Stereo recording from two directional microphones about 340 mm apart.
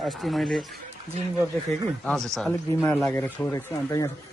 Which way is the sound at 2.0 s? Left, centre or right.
Centre.